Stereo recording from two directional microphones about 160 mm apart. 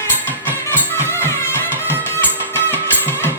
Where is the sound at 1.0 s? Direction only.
15° left (ahead or behind).